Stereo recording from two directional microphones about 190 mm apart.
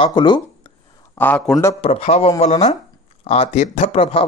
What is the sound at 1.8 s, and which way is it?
A man's voice, 30° left (ahead or behind).